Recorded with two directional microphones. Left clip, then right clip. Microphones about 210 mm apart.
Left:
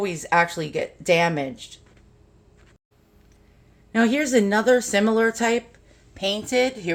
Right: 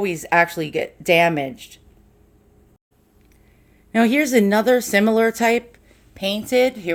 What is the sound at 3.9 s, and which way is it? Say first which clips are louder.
Speech: right 3 dB; 30° right (ahead or behind).